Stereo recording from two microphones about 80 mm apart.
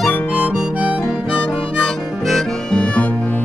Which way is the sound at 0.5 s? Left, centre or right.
Centre.